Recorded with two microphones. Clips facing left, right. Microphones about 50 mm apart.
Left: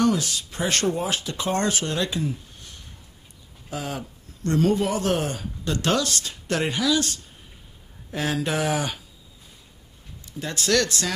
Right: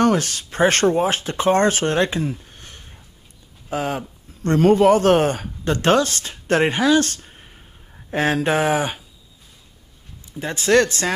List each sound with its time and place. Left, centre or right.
0.0 s speech: right
10.4 s speech: right